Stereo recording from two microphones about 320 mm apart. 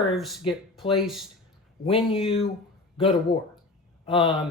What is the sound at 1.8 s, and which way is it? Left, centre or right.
Speech, centre.